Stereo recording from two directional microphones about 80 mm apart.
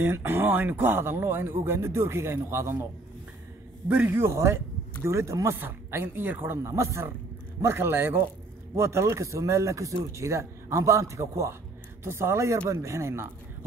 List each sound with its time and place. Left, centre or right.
0.0 s speech: right
3.9 s speech: centre
4.2 s speech: right